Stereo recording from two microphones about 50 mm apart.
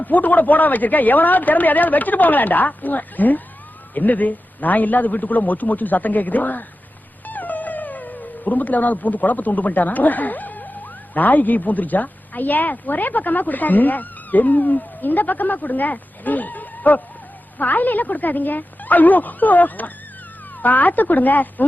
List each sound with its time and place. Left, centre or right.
0.0 s speech: left
7.3 s dog: left
11.1 s speech: left